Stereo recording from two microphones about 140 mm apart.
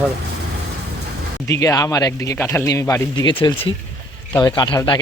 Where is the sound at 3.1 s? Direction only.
35° left (ahead or behind).